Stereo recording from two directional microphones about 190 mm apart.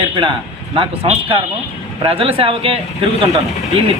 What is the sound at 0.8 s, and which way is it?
Speech, 30° right (ahead or behind).